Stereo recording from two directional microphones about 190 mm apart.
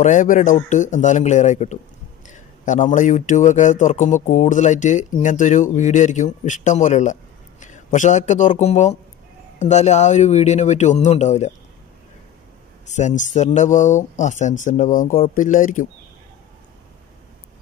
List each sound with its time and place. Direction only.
0.0 s speech: 40° left (ahead or behind)
12.8 s speech: 40° left (ahead or behind)